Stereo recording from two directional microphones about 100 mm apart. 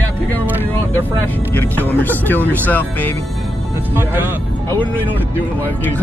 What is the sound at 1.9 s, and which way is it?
Speech, 20° left (ahead or behind).